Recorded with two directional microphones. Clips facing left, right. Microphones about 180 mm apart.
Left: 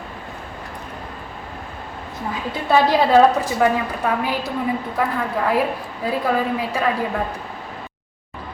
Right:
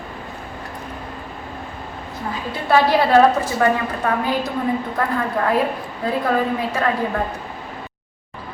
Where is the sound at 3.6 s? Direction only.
10° left (ahead or behind).